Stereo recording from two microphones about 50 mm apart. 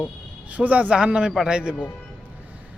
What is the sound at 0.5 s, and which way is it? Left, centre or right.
Speech, right.